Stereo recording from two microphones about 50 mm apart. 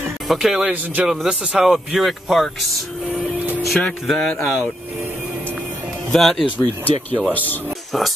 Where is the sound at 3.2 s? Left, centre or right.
Right.